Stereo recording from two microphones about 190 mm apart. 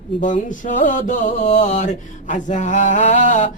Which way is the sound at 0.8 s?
40° left (ahead or behind).